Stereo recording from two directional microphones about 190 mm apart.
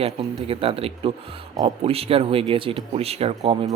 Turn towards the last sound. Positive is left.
turn(degrees=-35)  # may be behind; listen again after turning